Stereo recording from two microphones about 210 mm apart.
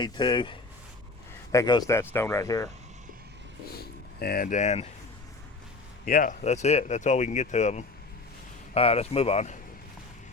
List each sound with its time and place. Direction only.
0.0 s speech: 20° left (ahead or behind)
4.2 s speech: 45° left (ahead or behind)
6.1 s speech: 40° left (ahead or behind)